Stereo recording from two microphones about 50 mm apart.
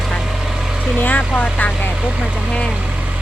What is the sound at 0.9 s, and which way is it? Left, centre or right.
Speech, left.